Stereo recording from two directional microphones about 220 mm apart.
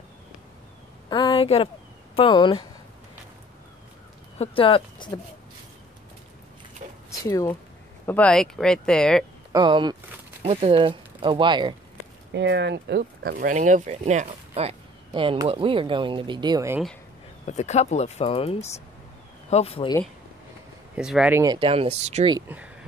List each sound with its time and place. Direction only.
1.1 s a woman's voice: 20° left (ahead or behind)
4.4 s speech: 25° left (ahead or behind)
7.1 s speech: 15° left (ahead or behind)
9.5 s speech: 20° right (ahead or behind)
12.3 s speech: 55° right (ahead or behind); by 16.8 s 15° right (ahead or behind)
17.5 s speech: 30° left (ahead or behind)
20.9 s speech: 5° right (ahead or behind)
21.5 s speech: 25° right (ahead or behind)